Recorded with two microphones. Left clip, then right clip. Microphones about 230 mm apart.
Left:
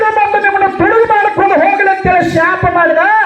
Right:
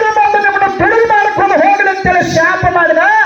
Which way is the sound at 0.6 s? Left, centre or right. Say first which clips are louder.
Even; left.